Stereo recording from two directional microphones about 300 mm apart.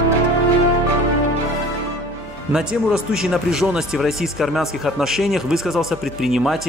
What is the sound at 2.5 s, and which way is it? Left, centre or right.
Speech, centre.